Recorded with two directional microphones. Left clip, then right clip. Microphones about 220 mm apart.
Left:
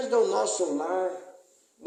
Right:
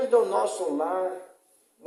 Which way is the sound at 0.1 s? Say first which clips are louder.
Left 1 dB; 35° left (ahead or behind).